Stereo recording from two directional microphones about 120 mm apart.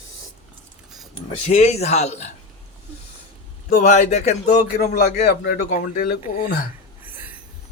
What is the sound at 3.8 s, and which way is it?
Speech, 75° left (ahead or behind).